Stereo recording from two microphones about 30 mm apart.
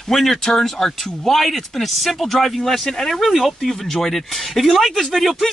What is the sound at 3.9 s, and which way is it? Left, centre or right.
Speech, centre.